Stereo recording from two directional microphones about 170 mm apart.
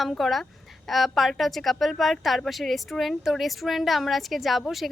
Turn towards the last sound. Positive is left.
turn(degrees=0)  # may be behind; listen again after turning